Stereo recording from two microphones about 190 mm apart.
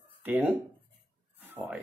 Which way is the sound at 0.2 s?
5° right (ahead or behind).